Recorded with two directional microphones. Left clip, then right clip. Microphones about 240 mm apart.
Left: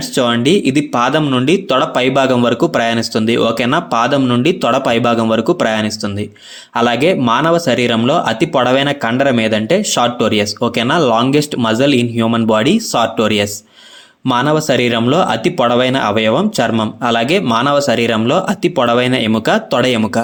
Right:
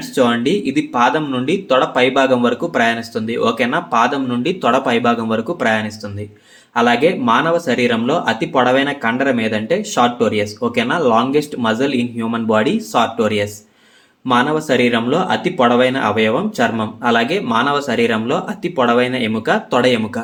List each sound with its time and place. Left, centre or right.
0.2 s speech: left